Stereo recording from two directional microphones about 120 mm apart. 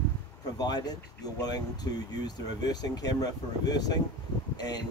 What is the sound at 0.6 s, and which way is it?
Speech, 35° left (ahead or behind).